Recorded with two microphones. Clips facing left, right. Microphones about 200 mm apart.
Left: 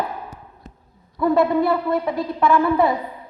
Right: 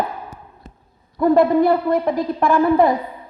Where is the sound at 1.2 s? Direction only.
50° right (ahead or behind).